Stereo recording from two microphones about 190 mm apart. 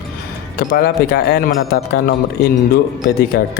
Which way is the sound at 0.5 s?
55° left (ahead or behind).